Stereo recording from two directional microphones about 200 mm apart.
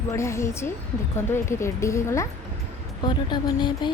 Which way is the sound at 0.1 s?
15° left (ahead or behind).